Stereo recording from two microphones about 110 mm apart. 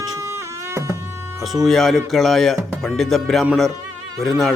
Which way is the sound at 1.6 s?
5° left (ahead or behind).